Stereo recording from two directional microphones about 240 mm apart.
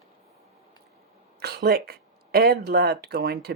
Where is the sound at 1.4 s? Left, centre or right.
Right.